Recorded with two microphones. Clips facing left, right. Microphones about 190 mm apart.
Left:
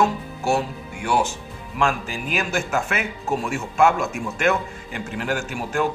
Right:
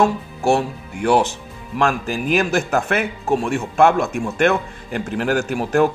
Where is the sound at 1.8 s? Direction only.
40° right (ahead or behind).